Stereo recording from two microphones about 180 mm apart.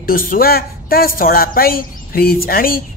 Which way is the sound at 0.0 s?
50° left (ahead or behind).